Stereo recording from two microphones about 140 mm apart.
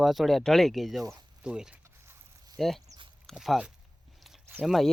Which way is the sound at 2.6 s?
Centre (ahead or behind).